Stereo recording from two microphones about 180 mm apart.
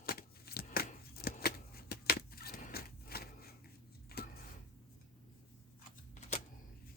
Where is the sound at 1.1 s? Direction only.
60° left (ahead or behind).